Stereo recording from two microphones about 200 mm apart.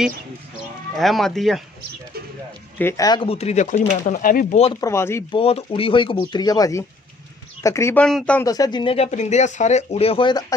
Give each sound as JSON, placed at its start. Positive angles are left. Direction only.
{"t": 0.9, "sound": "speech", "side_deg": 0}
{"t": 2.8, "sound": "speech", "side_deg": 15}
{"t": 4.7, "sound": "speech", "side_deg": 15}
{"t": 5.3, "sound": "speech", "side_deg": 25}
{"t": 8.5, "sound": "speech", "side_deg": 20}